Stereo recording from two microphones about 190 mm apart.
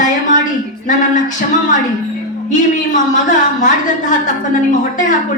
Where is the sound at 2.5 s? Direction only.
40° left (ahead or behind).